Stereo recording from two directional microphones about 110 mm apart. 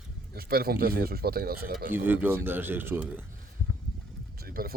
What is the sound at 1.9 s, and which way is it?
Speech, 15° right (ahead or behind).